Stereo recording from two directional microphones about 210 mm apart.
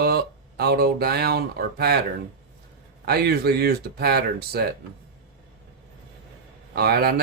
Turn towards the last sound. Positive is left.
turn(degrees=-50)  # may be behind; listen again after turning